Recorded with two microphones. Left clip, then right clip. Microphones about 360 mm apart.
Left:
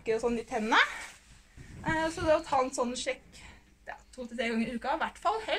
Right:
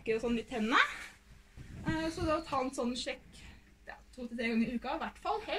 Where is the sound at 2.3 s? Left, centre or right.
Centre.